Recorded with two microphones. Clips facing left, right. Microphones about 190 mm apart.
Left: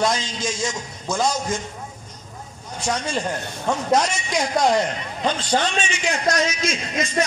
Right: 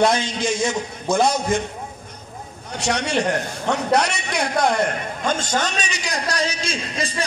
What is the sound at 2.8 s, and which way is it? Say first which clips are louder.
A man's voice: right 3 dB; 70° right (ahead or behind).